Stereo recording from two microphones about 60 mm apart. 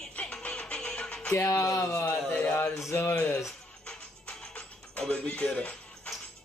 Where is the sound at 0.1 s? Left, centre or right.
Centre.